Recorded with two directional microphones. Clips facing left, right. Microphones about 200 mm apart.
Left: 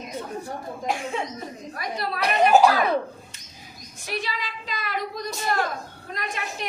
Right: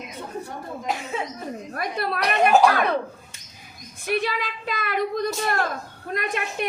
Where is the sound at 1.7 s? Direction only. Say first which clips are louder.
Right 3 dB; 55° right (ahead or behind).